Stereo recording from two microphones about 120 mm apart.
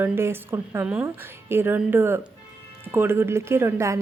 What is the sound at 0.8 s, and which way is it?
Speech, 10° right (ahead or behind).